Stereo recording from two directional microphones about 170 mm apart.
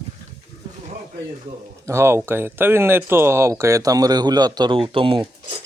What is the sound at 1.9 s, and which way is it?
Speech, 15° right (ahead or behind).